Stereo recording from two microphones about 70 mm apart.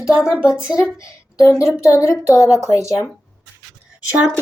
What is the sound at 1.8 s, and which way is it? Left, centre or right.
Speech, left.